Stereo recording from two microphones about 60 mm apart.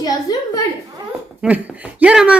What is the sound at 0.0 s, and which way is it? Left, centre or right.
Speech, left.